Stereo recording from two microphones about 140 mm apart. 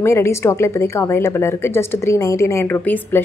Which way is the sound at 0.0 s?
20° left (ahead or behind).